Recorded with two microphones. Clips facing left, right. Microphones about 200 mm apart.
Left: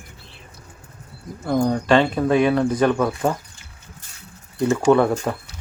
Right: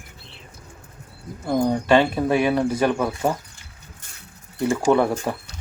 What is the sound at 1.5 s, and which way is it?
Speech, 20° right (ahead or behind).